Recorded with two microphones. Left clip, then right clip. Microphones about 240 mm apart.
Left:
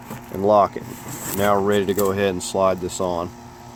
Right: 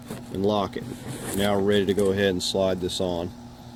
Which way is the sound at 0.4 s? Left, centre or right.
Centre.